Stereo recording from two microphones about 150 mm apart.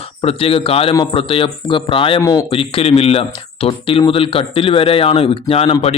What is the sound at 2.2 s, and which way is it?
Speech, 20° left (ahead or behind).